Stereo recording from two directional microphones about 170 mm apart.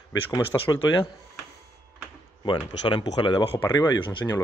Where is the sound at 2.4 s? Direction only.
25° left (ahead or behind).